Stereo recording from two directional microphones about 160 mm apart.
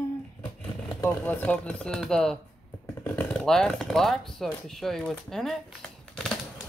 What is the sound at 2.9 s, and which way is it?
Speech, 15° left (ahead or behind).